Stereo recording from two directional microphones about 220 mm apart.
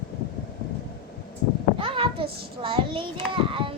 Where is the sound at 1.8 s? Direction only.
25° right (ahead or behind).